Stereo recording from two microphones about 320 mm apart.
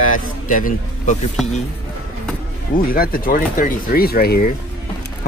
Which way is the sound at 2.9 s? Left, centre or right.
Left.